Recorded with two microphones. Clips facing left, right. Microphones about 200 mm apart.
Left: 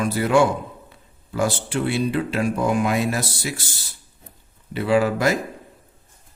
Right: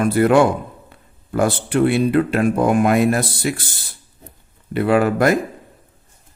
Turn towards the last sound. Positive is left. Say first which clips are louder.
# right 4 dB
turn(degrees=-55)  # may be behind; listen again after turning